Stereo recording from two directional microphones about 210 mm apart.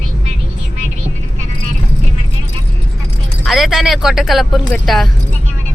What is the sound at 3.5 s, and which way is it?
Speech, centre (ahead or behind).